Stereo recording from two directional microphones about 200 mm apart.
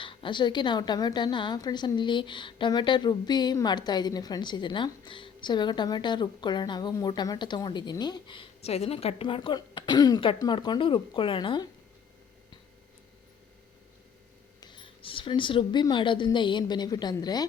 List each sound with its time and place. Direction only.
0.0 s a woman's voice: 25° left (ahead or behind)
14.6 s a woman's voice: 25° left (ahead or behind)